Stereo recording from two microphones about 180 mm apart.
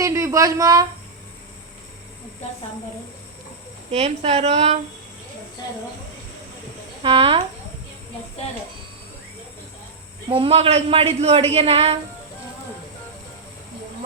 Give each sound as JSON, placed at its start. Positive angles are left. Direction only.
{"t": 0.0, "sound": "a woman's voice", "side_deg": -15}
{"t": 3.9, "sound": "a man's voice", "side_deg": -35}
{"t": 7.0, "sound": "speech", "side_deg": -30}
{"t": 10.2, "sound": "a man's voice", "side_deg": -30}